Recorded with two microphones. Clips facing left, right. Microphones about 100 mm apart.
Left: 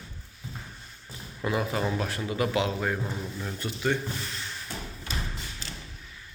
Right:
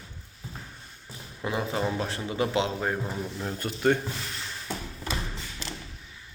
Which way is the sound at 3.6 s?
45° right (ahead or behind).